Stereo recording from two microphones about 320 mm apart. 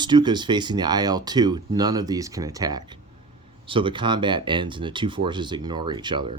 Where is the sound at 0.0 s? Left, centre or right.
Centre.